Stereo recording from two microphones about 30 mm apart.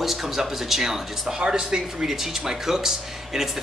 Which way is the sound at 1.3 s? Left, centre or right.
Right.